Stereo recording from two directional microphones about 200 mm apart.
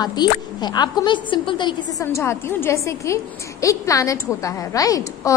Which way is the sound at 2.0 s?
10° left (ahead or behind).